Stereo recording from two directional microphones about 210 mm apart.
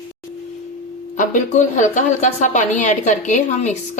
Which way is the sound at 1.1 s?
35° left (ahead or behind).